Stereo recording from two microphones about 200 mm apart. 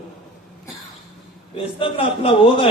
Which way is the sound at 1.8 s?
25° left (ahead or behind).